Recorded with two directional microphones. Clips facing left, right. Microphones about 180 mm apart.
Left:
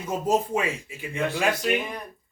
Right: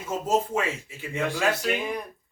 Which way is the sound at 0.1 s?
15° left (ahead or behind).